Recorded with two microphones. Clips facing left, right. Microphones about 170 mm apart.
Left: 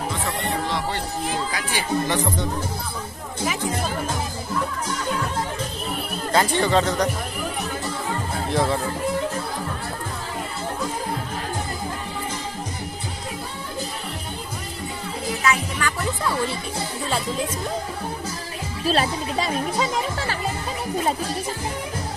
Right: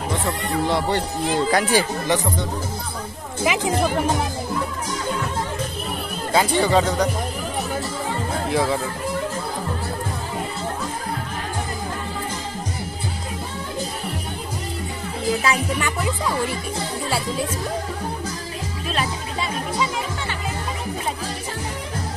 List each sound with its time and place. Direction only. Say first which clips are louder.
1.5 s speech: right 9 dB; 40° right (ahead or behind)
3.4 s speech: right 6 dB; 90° right
6.3 s speech: right 2 dB; 10° right (ahead or behind)
8.5 s speech: right 1 dB; 5° right (ahead or behind)
15.4 s speech: right 1 dB; 30° right (ahead or behind)
16.0 s speech: right 1 dB; 10° right (ahead or behind)
18.9 s speech: left 5 dB; 35° left (ahead or behind)